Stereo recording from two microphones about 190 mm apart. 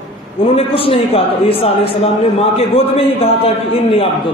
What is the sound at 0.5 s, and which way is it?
A man's voice, 30° left (ahead or behind).